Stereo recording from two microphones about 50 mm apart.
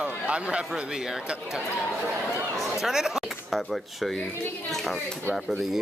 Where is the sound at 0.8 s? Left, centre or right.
Centre.